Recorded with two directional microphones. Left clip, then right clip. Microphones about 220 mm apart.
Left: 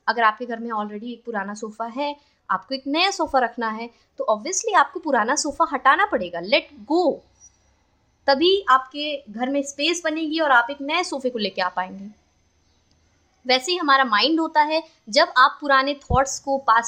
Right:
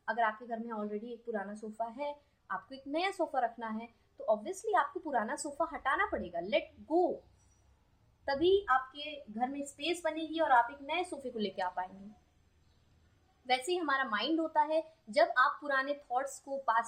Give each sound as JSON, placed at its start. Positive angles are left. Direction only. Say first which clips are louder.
{"t": 0.0, "sound": "a woman's voice", "louder": "left 13 dB", "side_deg": 45}
{"t": 8.2, "sound": "a woman's voice", "louder": "left 11 dB", "side_deg": 45}
{"t": 13.5, "sound": "a woman's voice", "louder": "left 13 dB", "side_deg": 40}